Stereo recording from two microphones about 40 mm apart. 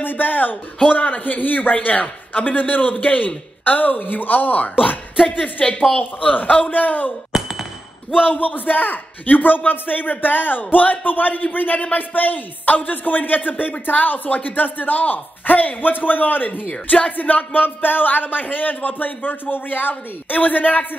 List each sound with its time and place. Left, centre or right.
0.0 s a sound: left
0.9 s speech: left
5.1 s a woman's voice: centre
5.4 s speech: left
7.3 s a sound: centre
8.3 s speech: left